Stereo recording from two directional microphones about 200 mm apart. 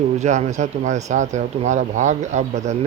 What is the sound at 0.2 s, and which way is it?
Speech, 35° right (ahead or behind).